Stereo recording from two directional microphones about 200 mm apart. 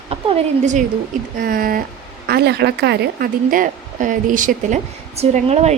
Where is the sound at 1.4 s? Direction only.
45° right (ahead or behind).